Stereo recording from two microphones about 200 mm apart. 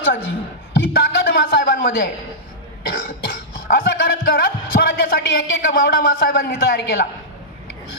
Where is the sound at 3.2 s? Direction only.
45° left (ahead or behind).